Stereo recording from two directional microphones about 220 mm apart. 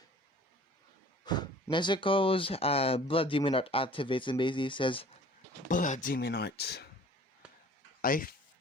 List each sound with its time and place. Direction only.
1.2 s speech: 20° left (ahead or behind)
5.6 s speech: 35° left (ahead or behind)
8.0 s speech: 40° left (ahead or behind)